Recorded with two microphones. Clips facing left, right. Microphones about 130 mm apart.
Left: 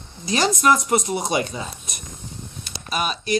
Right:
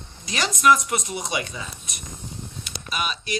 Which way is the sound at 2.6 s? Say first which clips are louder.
Left 4 dB; 40° left (ahead or behind).